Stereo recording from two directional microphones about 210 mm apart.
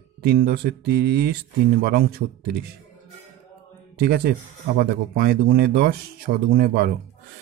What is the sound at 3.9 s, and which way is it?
Speech, 45° right (ahead or behind).